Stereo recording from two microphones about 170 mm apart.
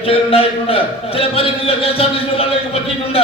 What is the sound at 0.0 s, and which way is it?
A man's voice, 35° left (ahead or behind).